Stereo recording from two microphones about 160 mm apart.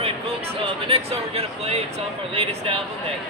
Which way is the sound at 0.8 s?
40° right (ahead or behind).